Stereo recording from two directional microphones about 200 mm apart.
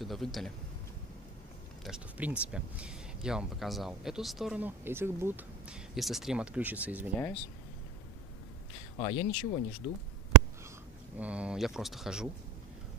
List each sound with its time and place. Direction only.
0.0 s speech: centre (ahead or behind)
1.9 s speech: 5° right (ahead or behind)
8.9 s speech: 25° left (ahead or behind)
11.1 s speech: 5° right (ahead or behind)